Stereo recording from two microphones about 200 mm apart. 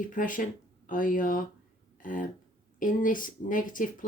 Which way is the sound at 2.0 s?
40° left (ahead or behind).